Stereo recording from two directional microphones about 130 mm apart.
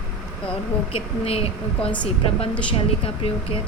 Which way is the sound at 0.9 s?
45° left (ahead or behind).